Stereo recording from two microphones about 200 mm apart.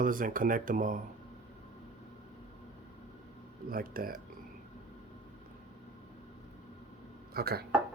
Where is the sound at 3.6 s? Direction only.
45° right (ahead or behind).